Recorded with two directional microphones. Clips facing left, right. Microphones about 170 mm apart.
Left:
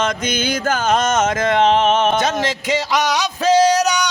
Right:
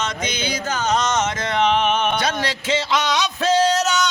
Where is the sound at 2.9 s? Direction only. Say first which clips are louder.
Left 2 dB; 10° left (ahead or behind).